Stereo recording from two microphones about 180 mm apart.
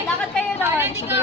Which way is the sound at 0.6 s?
15° right (ahead or behind).